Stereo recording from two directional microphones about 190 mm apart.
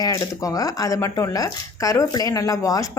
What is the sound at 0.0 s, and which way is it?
Speech, 20° left (ahead or behind).